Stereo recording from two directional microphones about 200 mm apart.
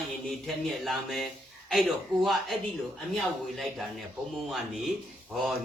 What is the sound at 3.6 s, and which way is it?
Speech, centre (ahead or behind).